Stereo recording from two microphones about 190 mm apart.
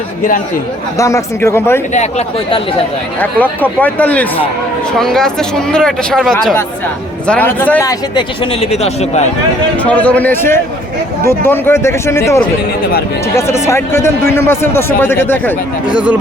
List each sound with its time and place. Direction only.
0.9 s speech: 15° left (ahead or behind)
1.9 s speech: 35° left (ahead or behind)
3.2 s speech: 10° left (ahead or behind)
8.1 s speech: 30° left (ahead or behind)
9.7 s speech: 10° left (ahead or behind)
15.9 s speech: 5° right (ahead or behind)